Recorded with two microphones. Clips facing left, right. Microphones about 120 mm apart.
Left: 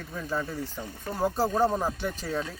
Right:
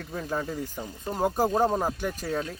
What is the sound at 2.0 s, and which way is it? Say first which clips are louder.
Speech: right 1 dB; 45° right (ahead or behind).